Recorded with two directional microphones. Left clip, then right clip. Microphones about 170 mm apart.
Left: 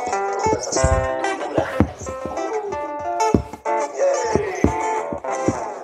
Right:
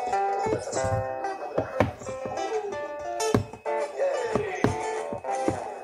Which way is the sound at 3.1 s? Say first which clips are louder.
Left 7 dB; 20° left (ahead or behind).